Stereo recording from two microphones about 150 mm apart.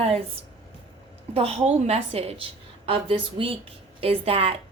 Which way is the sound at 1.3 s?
40° right (ahead or behind).